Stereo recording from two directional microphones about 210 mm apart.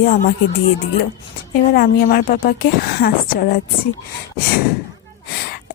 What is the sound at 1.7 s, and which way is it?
A woman's voice, 45° left (ahead or behind).